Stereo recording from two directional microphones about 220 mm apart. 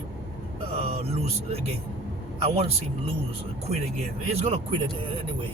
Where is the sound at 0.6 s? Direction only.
25° right (ahead or behind).